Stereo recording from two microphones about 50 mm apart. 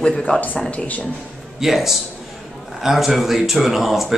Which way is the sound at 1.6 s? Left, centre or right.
Centre.